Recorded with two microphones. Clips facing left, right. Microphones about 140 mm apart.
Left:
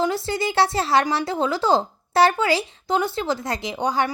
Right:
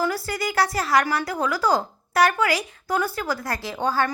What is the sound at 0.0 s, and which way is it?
Speech, 25° left (ahead or behind).